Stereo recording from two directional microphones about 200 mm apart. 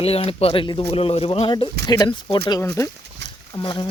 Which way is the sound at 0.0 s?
30° left (ahead or behind).